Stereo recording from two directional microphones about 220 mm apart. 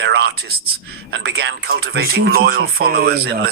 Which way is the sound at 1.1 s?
50° right (ahead or behind).